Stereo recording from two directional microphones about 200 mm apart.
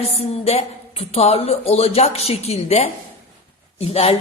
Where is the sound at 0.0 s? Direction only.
30° left (ahead or behind).